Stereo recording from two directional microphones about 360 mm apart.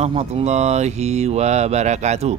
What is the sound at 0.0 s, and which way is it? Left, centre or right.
Speech, centre.